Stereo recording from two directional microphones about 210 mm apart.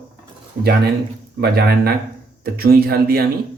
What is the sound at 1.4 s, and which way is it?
Speech, 50° right (ahead or behind).